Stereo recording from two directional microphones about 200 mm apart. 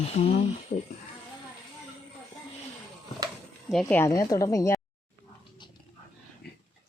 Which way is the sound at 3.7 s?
5° left (ahead or behind).